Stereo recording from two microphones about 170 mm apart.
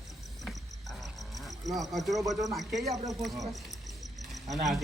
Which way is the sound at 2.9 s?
20° right (ahead or behind).